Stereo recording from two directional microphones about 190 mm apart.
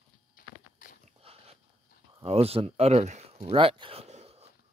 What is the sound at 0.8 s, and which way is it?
Biting, 45° left (ahead or behind).